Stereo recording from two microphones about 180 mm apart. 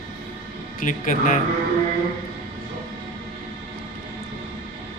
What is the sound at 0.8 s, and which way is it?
Speech, 45° left (ahead or behind).